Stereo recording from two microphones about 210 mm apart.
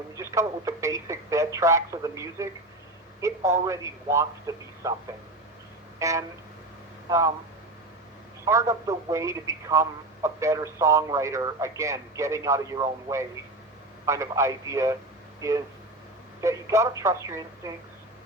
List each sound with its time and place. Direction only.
0.2 s speech: 15° right (ahead or behind)
6.0 s vehicle: 15° right (ahead or behind)
7.1 s speech: 15° right (ahead or behind)
8.4 s speech: 15° right (ahead or behind)